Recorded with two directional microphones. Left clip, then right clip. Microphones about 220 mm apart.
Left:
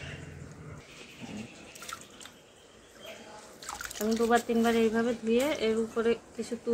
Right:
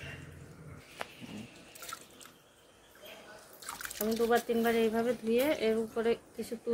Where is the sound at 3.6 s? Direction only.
Centre (ahead or behind); by 6.4 s 15° right (ahead or behind).